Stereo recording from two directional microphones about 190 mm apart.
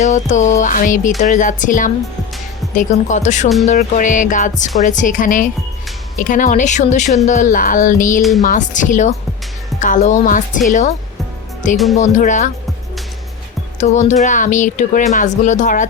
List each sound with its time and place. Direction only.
0.0 s speech: 40° left (ahead or behind)
1.2 s music: 40° left (ahead or behind)
2.7 s speech: 40° left (ahead or behind)
4.8 s music: 40° left (ahead or behind)
6.1 s speech: 45° left (ahead or behind)
7.3 s music: 40° left (ahead or behind)
8.4 s speech: 40° left (ahead or behind)
9.8 s music: 40° left (ahead or behind)
10.7 s speech: 40° left (ahead or behind)
11.9 s speech: 40° left (ahead or behind)
13.7 s speech: 40° left (ahead or behind)